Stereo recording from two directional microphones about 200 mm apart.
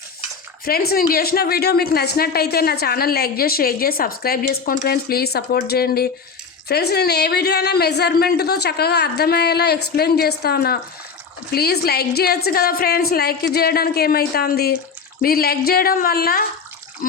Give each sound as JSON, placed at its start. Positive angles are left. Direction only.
{"t": 0.6, "sound": "a woman's voice", "side_deg": 50}